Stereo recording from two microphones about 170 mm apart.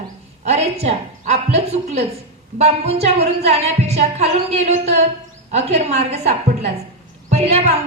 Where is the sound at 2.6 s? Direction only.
40° right (ahead or behind).